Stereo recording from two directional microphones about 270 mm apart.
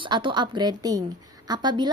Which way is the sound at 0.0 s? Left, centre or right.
Centre.